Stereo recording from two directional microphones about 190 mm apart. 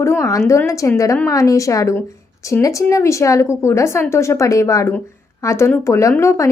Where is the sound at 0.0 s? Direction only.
15° left (ahead or behind).